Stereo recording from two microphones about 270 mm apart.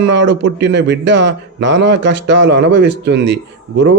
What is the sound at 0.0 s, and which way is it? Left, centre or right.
A man's voice, right.